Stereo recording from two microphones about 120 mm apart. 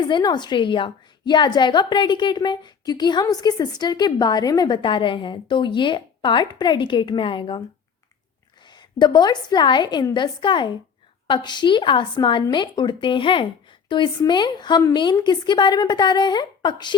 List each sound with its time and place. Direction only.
0.1 s a woman's voice: 35° left (ahead or behind)
8.6 s a woman's voice: 40° left (ahead or behind)